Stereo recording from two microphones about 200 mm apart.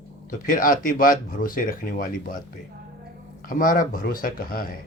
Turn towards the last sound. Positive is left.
turn(degrees=45)  # may be behind; listen again after turning